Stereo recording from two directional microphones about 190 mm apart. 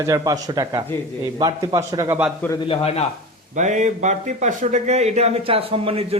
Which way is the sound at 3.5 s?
40° right (ahead or behind).